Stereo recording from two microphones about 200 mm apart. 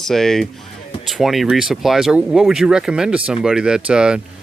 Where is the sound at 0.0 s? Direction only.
Centre (ahead or behind).